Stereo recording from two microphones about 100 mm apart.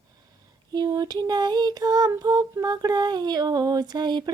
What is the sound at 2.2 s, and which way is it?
Female singing, 40° right (ahead or behind).